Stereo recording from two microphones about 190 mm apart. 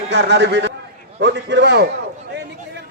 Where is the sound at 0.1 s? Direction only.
65° right (ahead or behind).